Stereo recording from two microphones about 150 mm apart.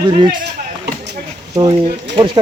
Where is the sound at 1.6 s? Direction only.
25° right (ahead or behind).